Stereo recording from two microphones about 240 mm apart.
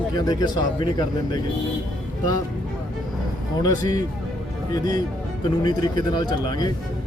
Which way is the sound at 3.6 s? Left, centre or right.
Centre.